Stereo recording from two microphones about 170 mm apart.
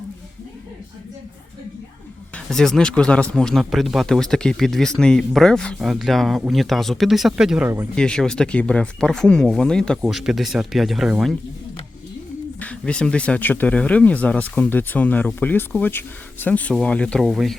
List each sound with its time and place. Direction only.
2.5 s speech: 5° left (ahead or behind)
12.5 s speech: 5° left (ahead or behind)